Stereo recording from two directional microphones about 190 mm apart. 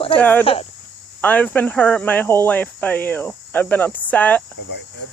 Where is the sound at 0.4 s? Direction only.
30° left (ahead or behind).